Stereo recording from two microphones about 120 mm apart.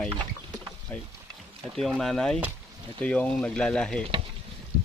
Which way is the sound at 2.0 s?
5° left (ahead or behind).